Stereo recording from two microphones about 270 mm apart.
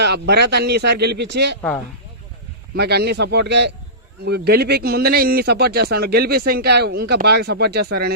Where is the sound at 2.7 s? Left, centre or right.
Right.